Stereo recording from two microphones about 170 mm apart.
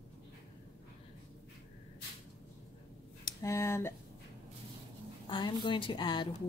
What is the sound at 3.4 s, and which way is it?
Speech, 15° left (ahead or behind).